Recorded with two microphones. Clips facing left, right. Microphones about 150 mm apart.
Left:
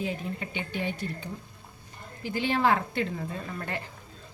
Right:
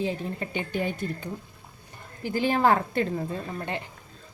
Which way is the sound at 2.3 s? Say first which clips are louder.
Right 3 dB; 40° right (ahead or behind).